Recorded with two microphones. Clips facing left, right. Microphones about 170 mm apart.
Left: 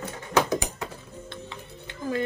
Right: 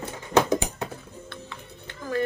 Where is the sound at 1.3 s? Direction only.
20° left (ahead or behind).